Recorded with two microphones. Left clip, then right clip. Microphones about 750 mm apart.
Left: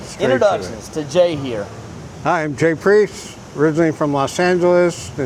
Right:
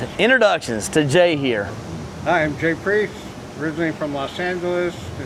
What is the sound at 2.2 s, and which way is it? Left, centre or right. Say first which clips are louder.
Speech: left 2 dB; left.